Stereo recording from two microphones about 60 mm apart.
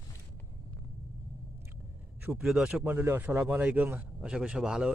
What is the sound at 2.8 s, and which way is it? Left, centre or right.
Speech, right.